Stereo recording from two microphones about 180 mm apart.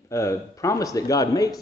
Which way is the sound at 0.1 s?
15° left (ahead or behind).